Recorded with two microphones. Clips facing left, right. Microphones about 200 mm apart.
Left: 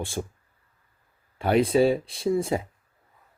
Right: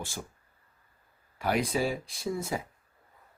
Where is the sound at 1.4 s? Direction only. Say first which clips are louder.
Left 8 dB; 30° left (ahead or behind).